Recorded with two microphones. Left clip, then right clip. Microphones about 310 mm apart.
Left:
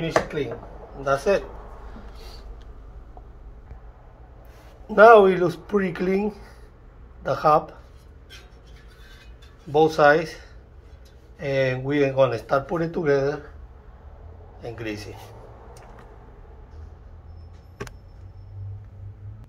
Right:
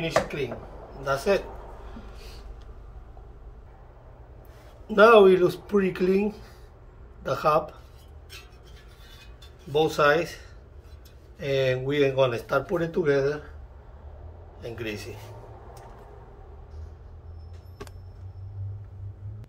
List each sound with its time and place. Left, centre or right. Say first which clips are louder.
0.0 s speech: left 2 dB; centre
4.9 s speech: left 3 dB; centre
9.7 s speech: left 5 dB; centre
14.8 s speech: left 1 dB; centre